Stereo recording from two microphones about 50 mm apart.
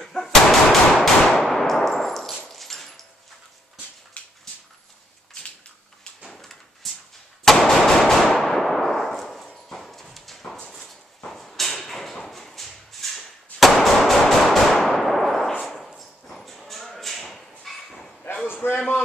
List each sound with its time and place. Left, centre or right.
0.0 s gunshot: centre
1.5 s clang: centre
2.5 s dog: centre
4.2 s dog: left
6.2 s drawer open or close: centre
7.4 s a sound: centre
9.7 s clip-clop: centre
11.2 s a sound: centre
18.5 s a sound: left